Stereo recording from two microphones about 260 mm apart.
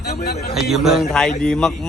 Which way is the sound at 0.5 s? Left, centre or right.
Centre.